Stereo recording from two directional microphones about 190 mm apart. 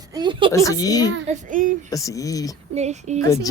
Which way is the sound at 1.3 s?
45° right (ahead or behind).